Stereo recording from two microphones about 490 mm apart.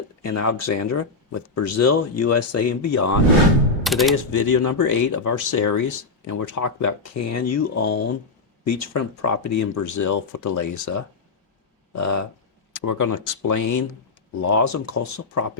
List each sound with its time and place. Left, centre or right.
0.2 s speech: left
3.8 s speech: centre
4.2 s speech: left